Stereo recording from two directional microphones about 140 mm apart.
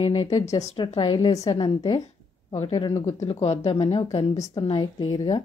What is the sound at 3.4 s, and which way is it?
A woman's voice, 50° left (ahead or behind).